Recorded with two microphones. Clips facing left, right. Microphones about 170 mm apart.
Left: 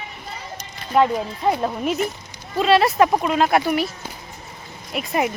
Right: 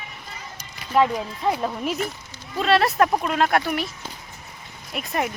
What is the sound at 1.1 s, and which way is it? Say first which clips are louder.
Speech: left 3 dB; 25° left (ahead or behind).